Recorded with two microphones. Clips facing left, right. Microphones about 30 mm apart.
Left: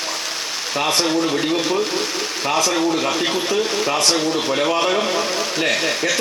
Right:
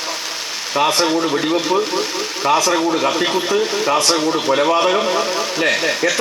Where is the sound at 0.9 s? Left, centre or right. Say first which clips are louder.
Right 1 dB; centre.